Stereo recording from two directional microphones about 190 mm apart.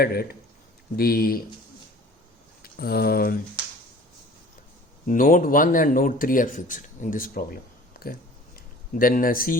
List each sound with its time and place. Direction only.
0.0 s speech: 55° left (ahead or behind)
2.6 s speech: 55° left (ahead or behind)
5.0 s speech: 45° left (ahead or behind)